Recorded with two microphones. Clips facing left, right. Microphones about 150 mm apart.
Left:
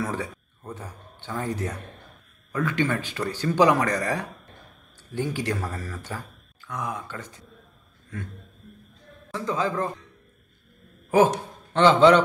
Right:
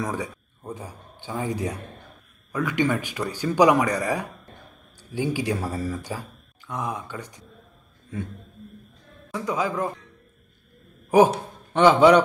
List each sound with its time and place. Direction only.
0.0 s speech: 15° right (ahead or behind)
9.3 s speech: 10° right (ahead or behind)
11.1 s speech: 15° right (ahead or behind)